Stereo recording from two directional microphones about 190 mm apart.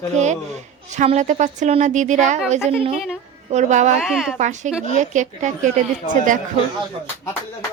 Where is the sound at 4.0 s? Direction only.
Centre (ahead or behind).